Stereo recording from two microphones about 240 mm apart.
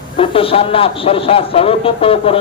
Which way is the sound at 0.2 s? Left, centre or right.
Left.